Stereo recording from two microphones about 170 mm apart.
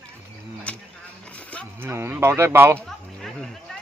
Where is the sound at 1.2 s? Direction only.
5° left (ahead or behind).